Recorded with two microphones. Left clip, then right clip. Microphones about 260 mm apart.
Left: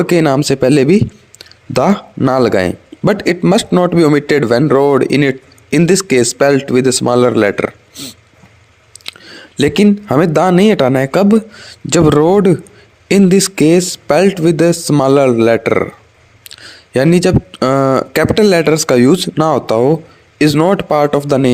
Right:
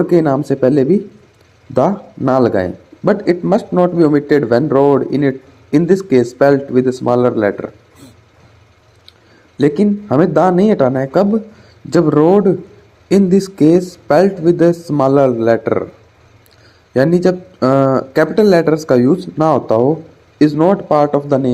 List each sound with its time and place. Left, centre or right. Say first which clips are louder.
0.0 s speech: left 1 dB; left
9.6 s speech: left 2 dB; left